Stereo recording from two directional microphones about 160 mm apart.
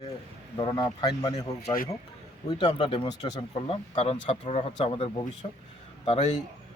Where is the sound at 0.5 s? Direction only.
25° left (ahead or behind).